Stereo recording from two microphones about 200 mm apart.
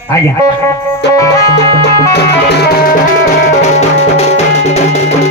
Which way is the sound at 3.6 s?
30° left (ahead or behind).